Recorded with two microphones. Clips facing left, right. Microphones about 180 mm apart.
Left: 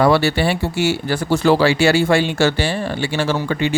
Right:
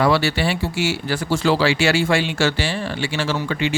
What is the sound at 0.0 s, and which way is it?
Speech, 50° left (ahead or behind).